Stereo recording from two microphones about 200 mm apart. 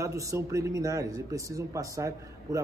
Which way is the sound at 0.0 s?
15° right (ahead or behind).